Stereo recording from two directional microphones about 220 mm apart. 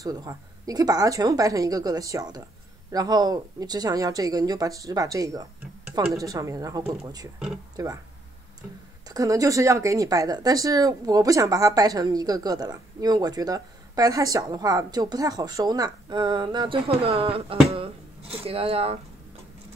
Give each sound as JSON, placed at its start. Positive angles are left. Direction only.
{"t": 0.0, "sound": "speech", "side_deg": -15}
{"t": 9.1, "sound": "speech", "side_deg": -15}